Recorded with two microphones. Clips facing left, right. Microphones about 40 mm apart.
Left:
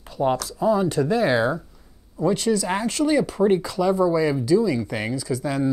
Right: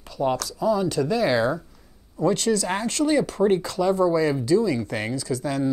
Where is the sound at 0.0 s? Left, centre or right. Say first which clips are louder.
Left 2 dB; left.